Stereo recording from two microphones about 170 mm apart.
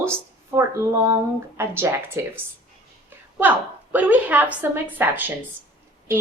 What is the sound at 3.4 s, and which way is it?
A woman's voice, 10° right (ahead or behind).